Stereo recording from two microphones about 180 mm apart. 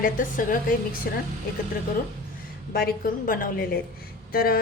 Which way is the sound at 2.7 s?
55° left (ahead or behind).